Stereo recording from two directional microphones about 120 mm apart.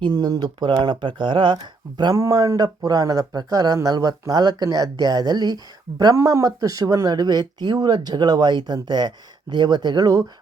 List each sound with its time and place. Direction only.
0.0 s speech: 35° right (ahead or behind)